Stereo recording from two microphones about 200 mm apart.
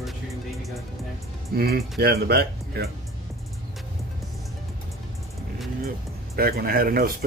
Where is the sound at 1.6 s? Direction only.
50° right (ahead or behind).